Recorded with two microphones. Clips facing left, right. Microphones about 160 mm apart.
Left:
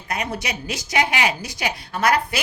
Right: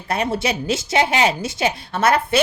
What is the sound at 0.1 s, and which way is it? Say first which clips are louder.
A woman's voice: right 6 dB; 30° right (ahead or behind).